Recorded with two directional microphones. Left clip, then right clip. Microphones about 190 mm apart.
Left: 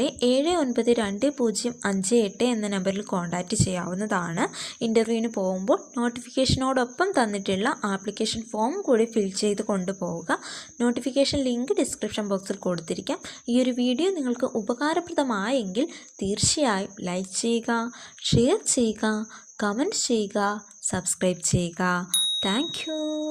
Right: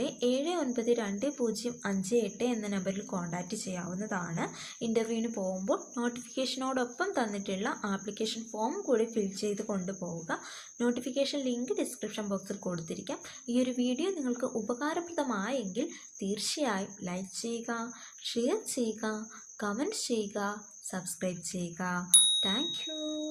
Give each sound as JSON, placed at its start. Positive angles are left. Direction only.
{"t": 0.0, "sound": "speech", "side_deg": 45}